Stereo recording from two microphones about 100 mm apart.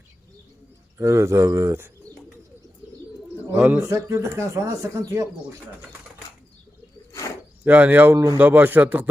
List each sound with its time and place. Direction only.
0.9 s speech: 30° right (ahead or behind)
3.6 s a man's voice: 15° right (ahead or behind)
3.8 s speech: 30° right (ahead or behind)
7.1 s a sound: 30° left (ahead or behind)
7.6 s a man's voice: 15° right (ahead or behind)